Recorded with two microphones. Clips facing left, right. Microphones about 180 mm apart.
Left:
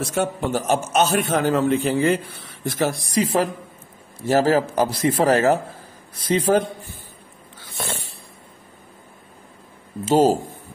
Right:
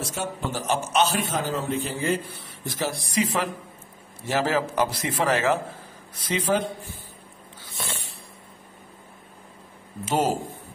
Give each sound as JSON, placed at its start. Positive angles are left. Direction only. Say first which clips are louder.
{"t": 0.1, "sound": "a man's voice", "louder": "left 8 dB", "side_deg": 60}
{"t": 2.6, "sound": "a man's voice", "louder": "left 6 dB", "side_deg": 55}
{"t": 3.1, "sound": "a man's voice", "louder": "left 5 dB", "side_deg": 40}
{"t": 7.7, "sound": "a sound", "louder": "left 5 dB", "side_deg": 50}
{"t": 10.0, "sound": "a man's voice", "louder": "left 8 dB", "side_deg": 30}